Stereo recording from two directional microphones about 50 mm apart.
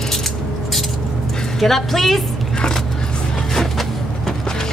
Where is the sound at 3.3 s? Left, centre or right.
Centre.